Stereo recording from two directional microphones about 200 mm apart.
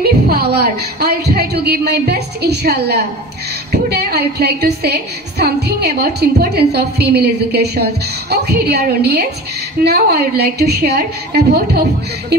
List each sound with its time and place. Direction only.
0.0 s a woman's voice: 50° right (ahead or behind)